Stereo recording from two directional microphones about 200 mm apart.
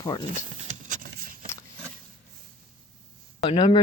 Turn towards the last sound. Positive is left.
turn(degrees=25)  # may be behind; listen again after turning